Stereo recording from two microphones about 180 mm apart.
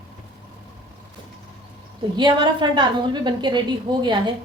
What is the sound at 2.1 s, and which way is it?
A woman's voice, 25° right (ahead or behind).